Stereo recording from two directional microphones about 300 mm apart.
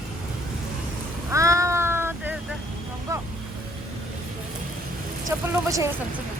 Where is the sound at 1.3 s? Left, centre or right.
Centre.